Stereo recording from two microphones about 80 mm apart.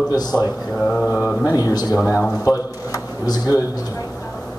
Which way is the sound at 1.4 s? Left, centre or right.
Left.